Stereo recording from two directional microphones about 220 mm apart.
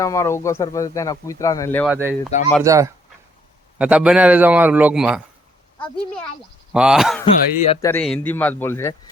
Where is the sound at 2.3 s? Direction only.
30° left (ahead or behind).